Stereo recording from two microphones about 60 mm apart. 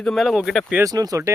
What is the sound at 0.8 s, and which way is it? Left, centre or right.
Speech, right.